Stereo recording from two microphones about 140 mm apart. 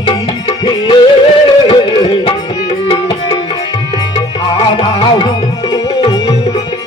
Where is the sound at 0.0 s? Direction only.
45° left (ahead or behind).